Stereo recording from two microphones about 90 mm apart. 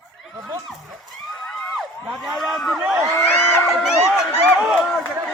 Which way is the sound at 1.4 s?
5° left (ahead or behind).